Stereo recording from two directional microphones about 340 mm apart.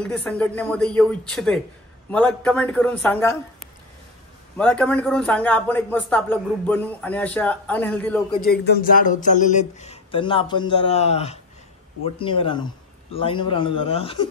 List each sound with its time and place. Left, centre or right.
0.0 s a man's voice: centre
4.6 s a man's voice: centre
8.5 s speech: left